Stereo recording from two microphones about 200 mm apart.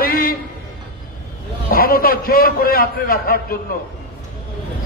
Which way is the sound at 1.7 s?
45° left (ahead or behind).